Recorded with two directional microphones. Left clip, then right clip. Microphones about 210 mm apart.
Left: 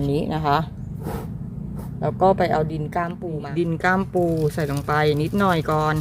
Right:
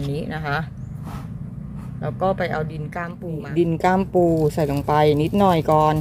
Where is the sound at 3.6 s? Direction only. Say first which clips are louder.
Right 2 dB; 5° right (ahead or behind).